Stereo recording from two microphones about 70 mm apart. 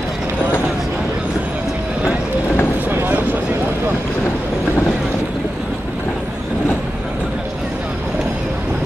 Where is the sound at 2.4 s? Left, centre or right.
Left.